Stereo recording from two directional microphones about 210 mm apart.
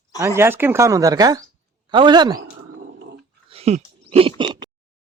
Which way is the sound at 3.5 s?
30° right (ahead or behind).